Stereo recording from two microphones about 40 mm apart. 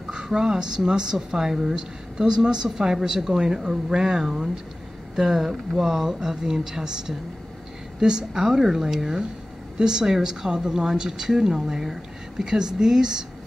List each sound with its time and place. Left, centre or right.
0.1 s a woman's voice: centre